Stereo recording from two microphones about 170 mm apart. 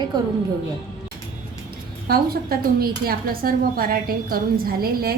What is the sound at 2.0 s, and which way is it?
Speech, 65° right (ahead or behind).